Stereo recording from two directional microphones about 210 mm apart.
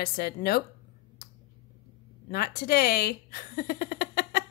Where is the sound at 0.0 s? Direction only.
45° left (ahead or behind).